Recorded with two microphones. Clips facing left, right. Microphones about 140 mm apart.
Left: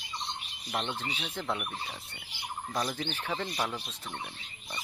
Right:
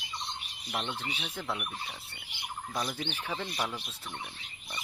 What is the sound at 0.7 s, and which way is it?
Fowl, 15° left (ahead or behind).